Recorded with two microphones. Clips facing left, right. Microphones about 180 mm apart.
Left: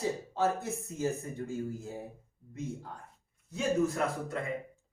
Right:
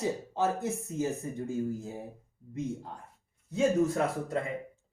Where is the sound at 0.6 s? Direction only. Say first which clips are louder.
Right 2 dB; 20° right (ahead or behind).